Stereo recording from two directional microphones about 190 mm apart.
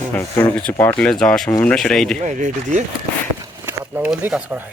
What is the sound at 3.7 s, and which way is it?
Speech, 10° right (ahead or behind).